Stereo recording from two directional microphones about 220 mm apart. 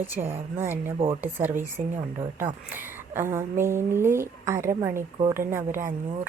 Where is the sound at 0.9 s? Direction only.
25° right (ahead or behind).